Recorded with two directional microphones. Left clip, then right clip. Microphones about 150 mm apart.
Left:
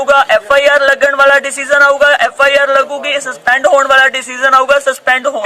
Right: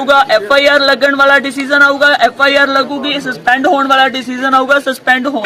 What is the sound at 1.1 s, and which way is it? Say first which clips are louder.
Speech: even; 10° left (ahead or behind).